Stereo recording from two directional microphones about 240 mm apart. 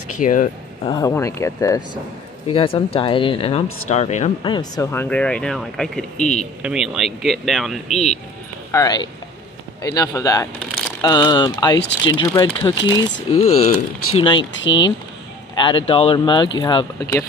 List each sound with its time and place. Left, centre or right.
0.2 s speech: left
0.8 s speech: centre
8.7 s speech: centre
14.0 s speech: left
14.7 s speech: centre